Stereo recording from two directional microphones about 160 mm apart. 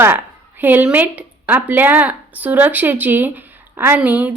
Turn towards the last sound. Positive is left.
turn(degrees=-10)  # may be behind; listen again after turning